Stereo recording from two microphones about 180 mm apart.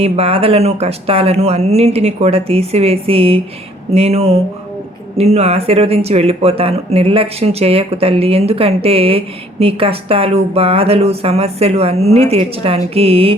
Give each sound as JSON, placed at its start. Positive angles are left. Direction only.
{"t": 0.0, "sound": "speech", "side_deg": -35}